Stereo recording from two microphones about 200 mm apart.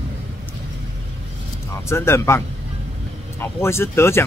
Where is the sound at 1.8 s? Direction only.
15° left (ahead or behind).